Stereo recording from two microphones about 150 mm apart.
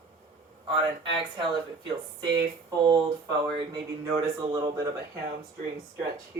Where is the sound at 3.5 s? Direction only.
30° right (ahead or behind).